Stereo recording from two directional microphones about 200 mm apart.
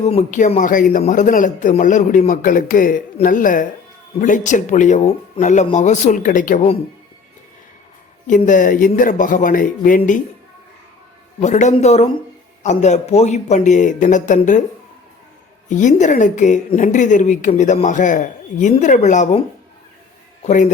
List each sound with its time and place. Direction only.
0.0 s a woman's voice: 30° left (ahead or behind)
8.4 s a woman's voice: 40° left (ahead or behind)
11.3 s a woman's voice: 35° left (ahead or behind)
15.7 s a woman's voice: 35° left (ahead or behind)